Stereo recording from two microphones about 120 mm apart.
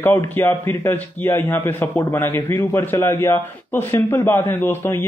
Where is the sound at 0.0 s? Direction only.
20° left (ahead or behind).